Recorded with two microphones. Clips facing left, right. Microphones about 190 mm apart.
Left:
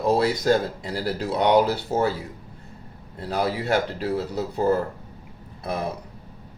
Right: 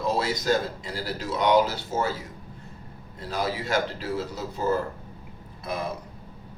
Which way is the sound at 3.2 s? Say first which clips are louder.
Left 4 dB; 65° left (ahead or behind).